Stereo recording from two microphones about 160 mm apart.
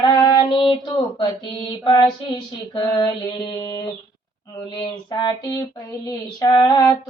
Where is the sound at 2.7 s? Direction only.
25° left (ahead or behind).